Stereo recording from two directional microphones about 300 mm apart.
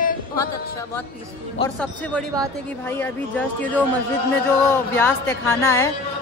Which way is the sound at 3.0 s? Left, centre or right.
Centre.